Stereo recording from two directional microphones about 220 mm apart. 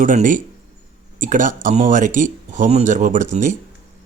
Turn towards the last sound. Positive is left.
turn(degrees=-35)  # may be behind; listen again after turning